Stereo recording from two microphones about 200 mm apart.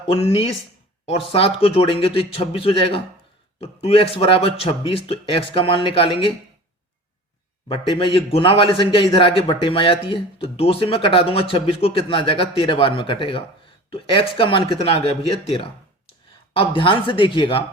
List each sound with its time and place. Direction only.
0.1 s a man's voice: 30° left (ahead or behind)
7.7 s a man's voice: 25° left (ahead or behind)